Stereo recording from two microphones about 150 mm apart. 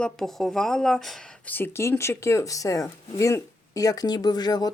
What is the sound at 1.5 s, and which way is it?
Speech, 15° left (ahead or behind).